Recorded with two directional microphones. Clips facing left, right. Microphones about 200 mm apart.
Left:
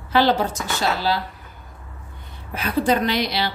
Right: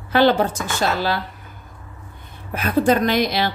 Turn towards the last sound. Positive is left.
turn(degrees=-50)  # may be behind; listen again after turning